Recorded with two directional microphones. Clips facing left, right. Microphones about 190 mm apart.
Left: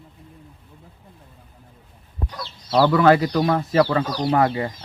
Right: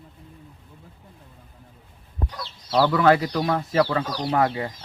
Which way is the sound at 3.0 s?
50° left (ahead or behind).